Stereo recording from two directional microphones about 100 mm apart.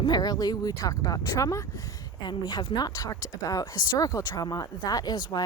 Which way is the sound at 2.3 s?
45° left (ahead or behind).